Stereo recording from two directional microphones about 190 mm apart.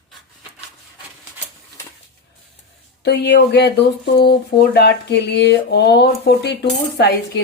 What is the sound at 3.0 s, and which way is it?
Speech, 65° left (ahead or behind).